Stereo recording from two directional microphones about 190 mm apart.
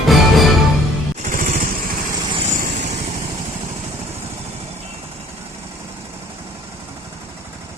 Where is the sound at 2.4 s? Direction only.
40° right (ahead or behind).